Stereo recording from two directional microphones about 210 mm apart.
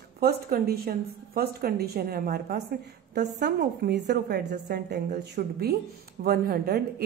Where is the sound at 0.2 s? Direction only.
45° right (ahead or behind).